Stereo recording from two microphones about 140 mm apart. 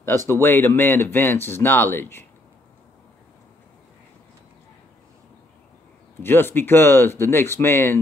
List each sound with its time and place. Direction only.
0.3 s speech: 15° left (ahead or behind)
6.2 s speech: 15° left (ahead or behind)